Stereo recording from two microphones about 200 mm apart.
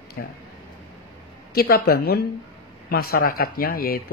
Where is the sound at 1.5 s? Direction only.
50° left (ahead or behind).